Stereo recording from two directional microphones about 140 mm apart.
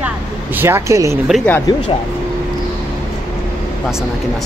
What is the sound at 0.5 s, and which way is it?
Speech, 15° right (ahead or behind).